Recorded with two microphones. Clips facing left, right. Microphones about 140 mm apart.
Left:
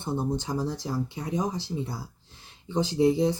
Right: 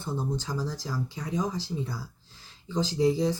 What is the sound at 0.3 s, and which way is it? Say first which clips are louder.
Speech: left 3 dB; 20° left (ahead or behind).